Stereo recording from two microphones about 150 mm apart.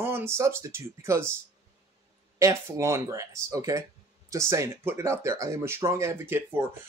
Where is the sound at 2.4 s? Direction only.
20° right (ahead or behind).